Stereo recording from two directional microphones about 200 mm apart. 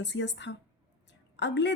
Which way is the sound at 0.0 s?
60° left (ahead or behind).